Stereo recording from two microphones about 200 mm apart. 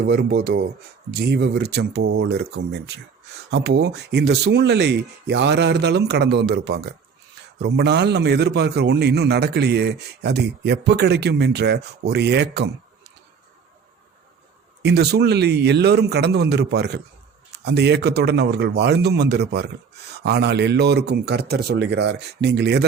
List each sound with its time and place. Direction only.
0.0 s speech: 55° right (ahead or behind)
14.8 s speech: 55° right (ahead or behind)